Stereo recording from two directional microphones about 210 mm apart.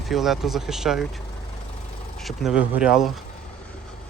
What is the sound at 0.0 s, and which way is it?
Speech, centre (ahead or behind).